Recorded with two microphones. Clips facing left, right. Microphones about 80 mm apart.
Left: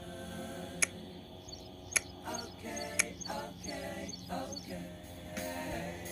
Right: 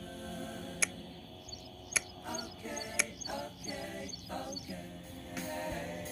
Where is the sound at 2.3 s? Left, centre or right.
Left.